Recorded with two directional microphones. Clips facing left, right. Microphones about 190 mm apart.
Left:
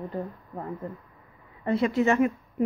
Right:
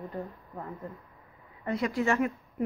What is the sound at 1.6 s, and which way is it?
Speech, 25° left (ahead or behind).